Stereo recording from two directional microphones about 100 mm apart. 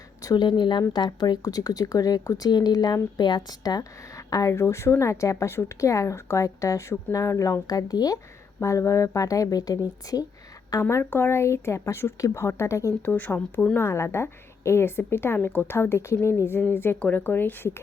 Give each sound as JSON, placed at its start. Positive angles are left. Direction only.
{"t": 0.2, "sound": "a sound", "side_deg": 35}
{"t": 0.4, "sound": "a woman's voice", "side_deg": 50}
{"t": 13.1, "sound": "a woman's voice", "side_deg": 20}